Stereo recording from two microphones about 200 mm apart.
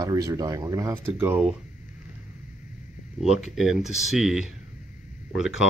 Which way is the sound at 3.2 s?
Centre (ahead or behind).